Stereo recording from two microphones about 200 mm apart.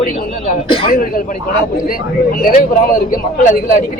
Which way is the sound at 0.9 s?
45° left (ahead or behind).